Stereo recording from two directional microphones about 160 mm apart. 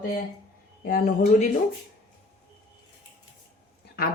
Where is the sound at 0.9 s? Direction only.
60° left (ahead or behind).